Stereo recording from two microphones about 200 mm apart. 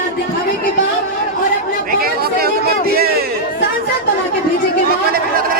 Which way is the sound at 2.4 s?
50° right (ahead or behind).